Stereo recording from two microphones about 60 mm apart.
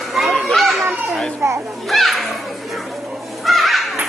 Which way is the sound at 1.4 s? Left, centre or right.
Right.